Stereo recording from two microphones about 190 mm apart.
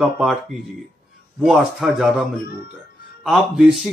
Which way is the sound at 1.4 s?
Centre (ahead or behind).